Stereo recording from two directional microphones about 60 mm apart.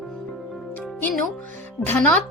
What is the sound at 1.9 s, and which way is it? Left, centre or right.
Speech, left.